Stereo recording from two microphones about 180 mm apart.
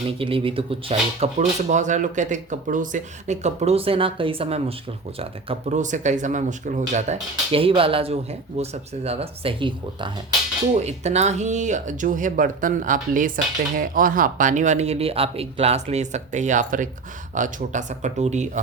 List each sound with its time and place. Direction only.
0.1 s speech: 30° right (ahead or behind)
10.8 s speech: 40° right (ahead or behind)